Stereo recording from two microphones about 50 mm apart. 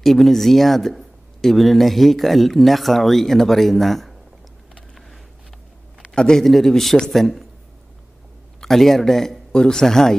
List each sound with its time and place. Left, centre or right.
0.0 s speech: centre
6.1 s a man's voice: centre
6.4 s speech: centre
8.5 s a man's voice: centre